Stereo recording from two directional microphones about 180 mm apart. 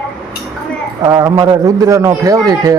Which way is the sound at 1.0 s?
20° right (ahead or behind).